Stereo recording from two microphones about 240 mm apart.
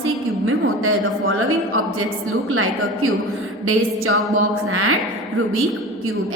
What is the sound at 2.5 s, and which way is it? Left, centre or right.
Speech, right.